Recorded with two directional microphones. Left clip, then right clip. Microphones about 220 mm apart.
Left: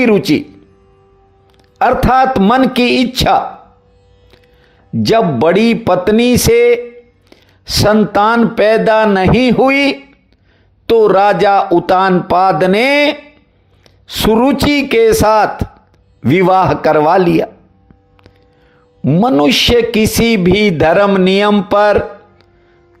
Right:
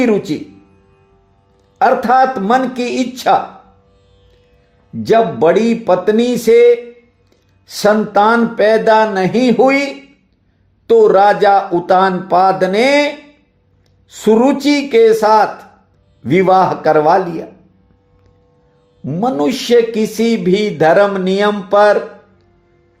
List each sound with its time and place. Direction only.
0.0 s speech: 30° left (ahead or behind)
1.8 s speech: 30° left (ahead or behind)
5.0 s speech: 30° left (ahead or behind)
19.0 s speech: 30° left (ahead or behind)